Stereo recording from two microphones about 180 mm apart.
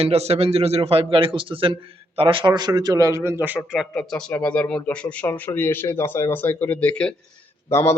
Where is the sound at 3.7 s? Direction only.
Centre (ahead or behind).